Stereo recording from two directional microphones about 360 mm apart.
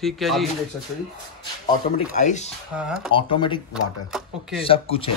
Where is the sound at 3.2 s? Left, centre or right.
Centre.